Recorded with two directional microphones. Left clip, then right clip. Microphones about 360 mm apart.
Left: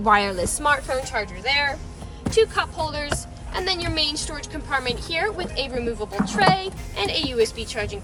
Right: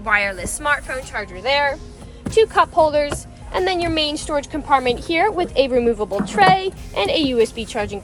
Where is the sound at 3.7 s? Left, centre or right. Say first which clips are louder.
Right 3 dB; centre.